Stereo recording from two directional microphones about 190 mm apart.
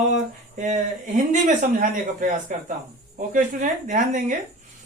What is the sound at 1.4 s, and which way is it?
Speech, 45° right (ahead or behind).